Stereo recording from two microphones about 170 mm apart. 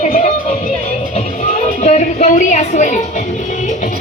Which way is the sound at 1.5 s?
40° left (ahead or behind).